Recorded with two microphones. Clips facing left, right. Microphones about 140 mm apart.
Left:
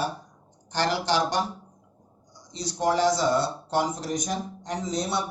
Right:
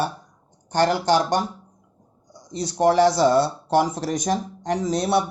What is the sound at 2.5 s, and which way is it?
Speech, 60° right (ahead or behind).